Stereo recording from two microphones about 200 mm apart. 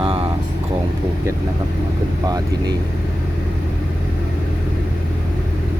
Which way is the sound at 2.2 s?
20° right (ahead or behind).